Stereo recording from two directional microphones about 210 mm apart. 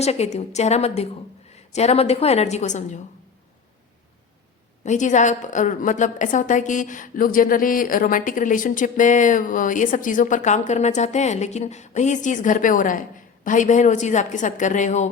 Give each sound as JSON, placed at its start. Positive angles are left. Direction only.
{"t": 0.0, "sound": "a woman's voice", "side_deg": 30}
{"t": 4.8, "sound": "a woman's voice", "side_deg": 35}